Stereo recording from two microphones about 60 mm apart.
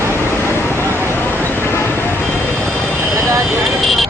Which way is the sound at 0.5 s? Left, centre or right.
Left.